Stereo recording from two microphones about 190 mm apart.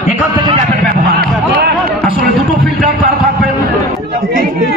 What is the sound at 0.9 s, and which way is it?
Music, 55° right (ahead or behind).